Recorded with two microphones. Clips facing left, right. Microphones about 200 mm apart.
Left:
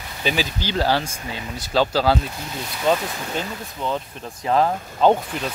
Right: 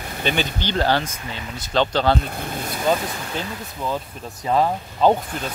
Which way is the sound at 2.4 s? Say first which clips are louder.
Right 3 dB; 50° right (ahead or behind).